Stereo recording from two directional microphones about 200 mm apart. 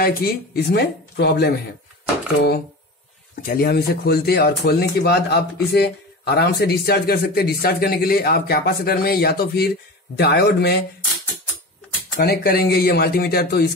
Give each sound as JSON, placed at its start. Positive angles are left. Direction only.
{"t": 0.0, "sound": "speech", "side_deg": 50}
{"t": 3.4, "sound": "a man's voice", "side_deg": 50}
{"t": 12.2, "sound": "speech", "side_deg": 50}